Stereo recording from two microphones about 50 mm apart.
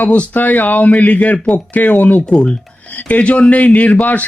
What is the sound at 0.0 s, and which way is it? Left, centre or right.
Speech, left.